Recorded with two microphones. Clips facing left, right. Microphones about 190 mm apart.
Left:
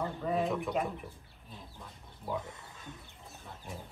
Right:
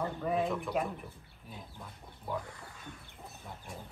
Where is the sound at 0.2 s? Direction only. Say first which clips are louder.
Left 1 dB; centre (ahead or behind).